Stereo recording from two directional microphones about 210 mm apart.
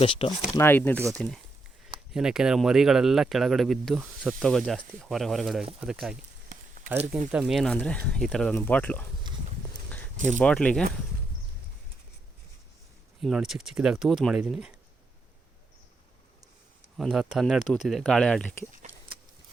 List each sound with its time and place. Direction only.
0.0 s speech: 25° left (ahead or behind)
0.5 s speech: 10° left (ahead or behind)
7.3 s speech: 5° right (ahead or behind)
10.4 s speech: 5° left (ahead or behind)
13.2 s speech: centre (ahead or behind)
17.0 s speech: centre (ahead or behind)